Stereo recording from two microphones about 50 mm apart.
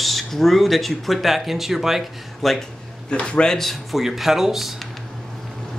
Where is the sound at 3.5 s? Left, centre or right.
Centre.